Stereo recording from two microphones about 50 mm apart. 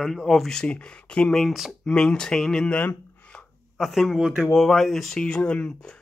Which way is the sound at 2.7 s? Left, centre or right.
Left.